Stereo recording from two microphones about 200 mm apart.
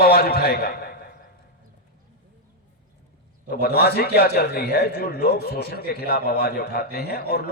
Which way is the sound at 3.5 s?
50° left (ahead or behind).